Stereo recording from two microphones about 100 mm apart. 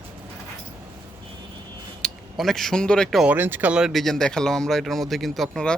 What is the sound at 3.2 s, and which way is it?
Speech, 20° right (ahead or behind).